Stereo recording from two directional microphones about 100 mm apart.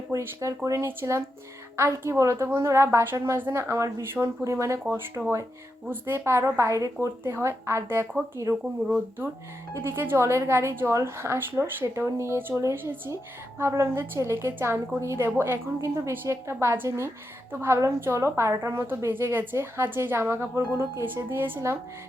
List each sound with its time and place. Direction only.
0.1 s a woman's voice: 30° right (ahead or behind)
9.7 s a woman's voice: 25° right (ahead or behind)